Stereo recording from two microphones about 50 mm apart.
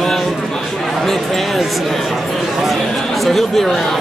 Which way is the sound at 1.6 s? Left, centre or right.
Centre.